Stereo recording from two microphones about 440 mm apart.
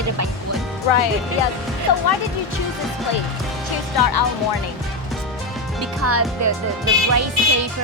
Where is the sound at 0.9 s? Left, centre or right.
Left.